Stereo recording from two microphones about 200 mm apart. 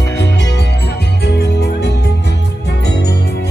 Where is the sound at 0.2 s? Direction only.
60° left (ahead or behind).